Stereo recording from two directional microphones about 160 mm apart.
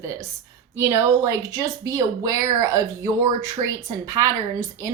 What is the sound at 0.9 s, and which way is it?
Speech, 20° right (ahead or behind).